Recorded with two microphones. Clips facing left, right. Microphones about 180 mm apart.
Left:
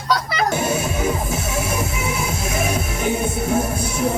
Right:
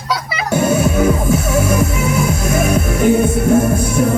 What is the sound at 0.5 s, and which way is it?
Music, 50° right (ahead or behind).